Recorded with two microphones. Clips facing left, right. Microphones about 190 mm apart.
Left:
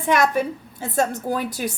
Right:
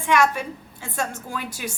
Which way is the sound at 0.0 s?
40° left (ahead or behind).